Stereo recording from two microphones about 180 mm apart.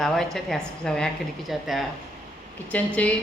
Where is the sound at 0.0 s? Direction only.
Centre (ahead or behind).